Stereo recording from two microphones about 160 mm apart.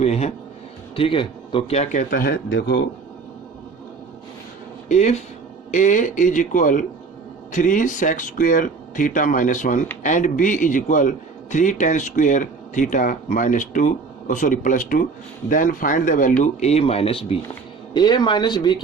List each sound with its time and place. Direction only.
0.0 s speech: 40° left (ahead or behind)
2.0 s speech: 80° left
4.9 s speech: 45° left (ahead or behind)
16.4 s speech: 45° left (ahead or behind); by 18.8 s 25° left (ahead or behind)